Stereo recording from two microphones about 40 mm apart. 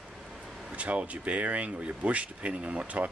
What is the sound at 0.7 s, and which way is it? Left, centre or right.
Speech, right.